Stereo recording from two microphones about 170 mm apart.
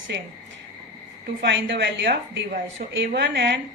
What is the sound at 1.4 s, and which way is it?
A woman's voice, 90° right.